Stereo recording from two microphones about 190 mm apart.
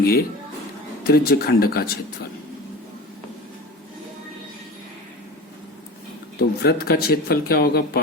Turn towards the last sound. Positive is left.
turn(degrees=55)  # may be behind; listen again after turning